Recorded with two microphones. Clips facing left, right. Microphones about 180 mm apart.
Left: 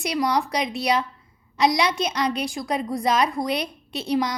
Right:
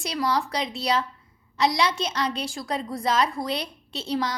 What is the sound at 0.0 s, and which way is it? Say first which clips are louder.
A woman's voice: left 3 dB; 15° left (ahead or behind).